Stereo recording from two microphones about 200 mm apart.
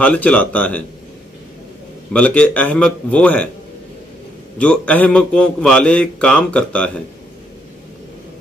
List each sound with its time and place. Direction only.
0.0 s a man's voice: 5° left (ahead or behind)
2.1 s a man's voice: 5° left (ahead or behind)
4.6 s a man's voice: 5° left (ahead or behind)